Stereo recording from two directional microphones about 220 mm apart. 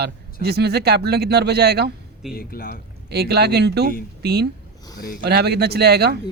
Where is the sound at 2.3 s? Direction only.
45° left (ahead or behind).